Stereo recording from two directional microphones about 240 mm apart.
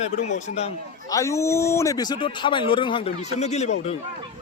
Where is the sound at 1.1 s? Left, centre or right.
Centre.